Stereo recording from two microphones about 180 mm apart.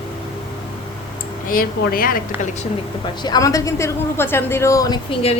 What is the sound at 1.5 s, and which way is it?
Speech, 50° left (ahead or behind).